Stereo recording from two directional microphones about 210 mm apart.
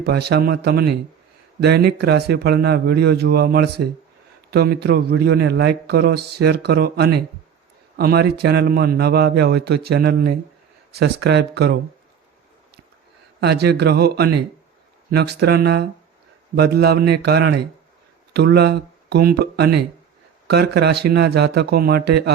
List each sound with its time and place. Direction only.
0.0 s a man's voice: 50° right (ahead or behind)
13.4 s a man's voice: 50° right (ahead or behind)